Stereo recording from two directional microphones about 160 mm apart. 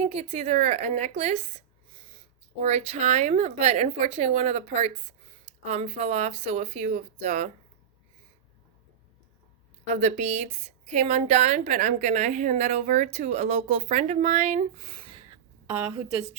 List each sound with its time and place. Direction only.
0.0 s a woman's voice: 40° right (ahead or behind)
2.6 s speech: 45° right (ahead or behind)
9.9 s a woman's voice: 45° right (ahead or behind)
15.6 s a woman's voice: 10° right (ahead or behind)